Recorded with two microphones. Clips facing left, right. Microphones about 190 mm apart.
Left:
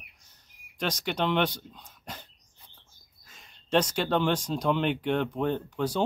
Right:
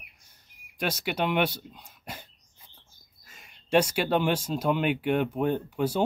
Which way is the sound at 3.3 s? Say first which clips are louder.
Right 2 dB; 10° right (ahead or behind).